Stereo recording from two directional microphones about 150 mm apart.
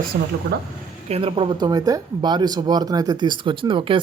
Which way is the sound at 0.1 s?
80° right.